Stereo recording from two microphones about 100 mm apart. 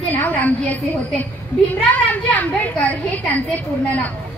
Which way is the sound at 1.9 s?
15° left (ahead or behind).